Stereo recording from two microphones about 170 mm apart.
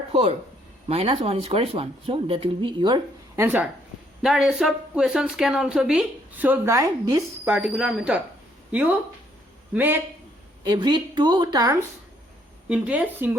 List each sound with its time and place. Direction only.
0.1 s speech: 35° right (ahead or behind)
3.4 s a woman's voice: 10° right (ahead or behind)
9.7 s speech: 10° right (ahead or behind)
10.7 s speech: 25° right (ahead or behind)
12.6 s speech: 5° right (ahead or behind)